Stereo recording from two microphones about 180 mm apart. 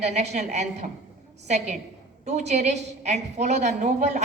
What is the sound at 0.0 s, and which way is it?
Speech, 40° right (ahead or behind).